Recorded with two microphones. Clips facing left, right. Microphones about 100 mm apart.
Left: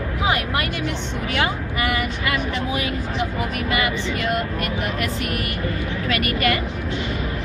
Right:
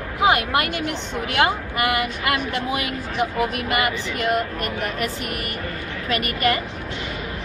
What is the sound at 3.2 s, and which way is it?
Speech, 55° right (ahead or behind).